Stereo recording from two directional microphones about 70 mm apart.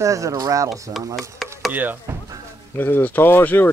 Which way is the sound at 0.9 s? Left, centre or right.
Right.